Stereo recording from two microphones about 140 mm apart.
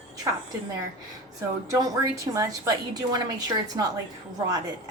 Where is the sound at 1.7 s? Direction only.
25° right (ahead or behind).